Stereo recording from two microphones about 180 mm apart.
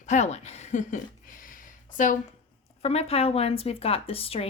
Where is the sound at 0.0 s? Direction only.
40° left (ahead or behind).